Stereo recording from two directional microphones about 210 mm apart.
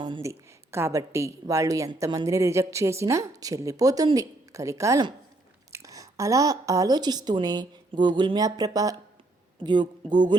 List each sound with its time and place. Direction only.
0.0 s a woman's voice: 20° right (ahead or behind)